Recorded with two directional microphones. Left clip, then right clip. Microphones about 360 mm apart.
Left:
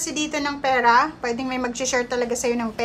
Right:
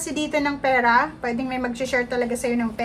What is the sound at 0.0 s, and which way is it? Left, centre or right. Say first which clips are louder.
A woman's voice: right 1 dB; centre.